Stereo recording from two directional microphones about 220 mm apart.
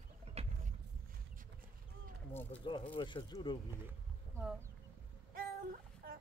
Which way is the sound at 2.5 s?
20° left (ahead or behind).